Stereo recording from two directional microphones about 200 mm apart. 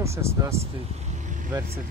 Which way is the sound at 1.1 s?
40° right (ahead or behind).